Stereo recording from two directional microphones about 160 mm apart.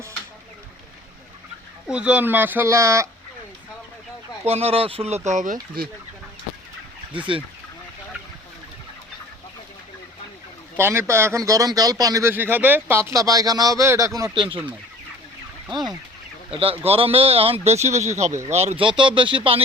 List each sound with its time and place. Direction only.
1.9 s speech: 10° right (ahead or behind)
4.4 s speech: 40° right (ahead or behind)
5.8 s speech: 65° right (ahead or behind)
7.3 s speech: 30° right (ahead or behind)
10.8 s speech: 15° right (ahead or behind)
14.3 s speech: 30° right (ahead or behind)